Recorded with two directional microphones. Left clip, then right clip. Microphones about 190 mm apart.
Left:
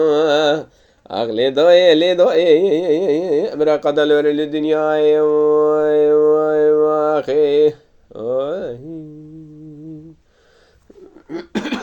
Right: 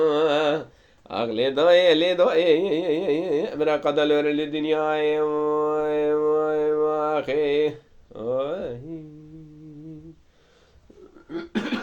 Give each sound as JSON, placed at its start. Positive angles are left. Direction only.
{"t": 0.0, "sound": "mantra", "side_deg": 40}
{"t": 1.0, "sound": "speech", "side_deg": 40}
{"t": 11.3, "sound": "cough", "side_deg": 55}